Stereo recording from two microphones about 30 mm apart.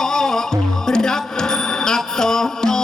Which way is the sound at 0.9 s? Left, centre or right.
Centre.